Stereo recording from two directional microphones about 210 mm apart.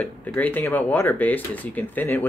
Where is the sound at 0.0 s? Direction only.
5° left (ahead or behind).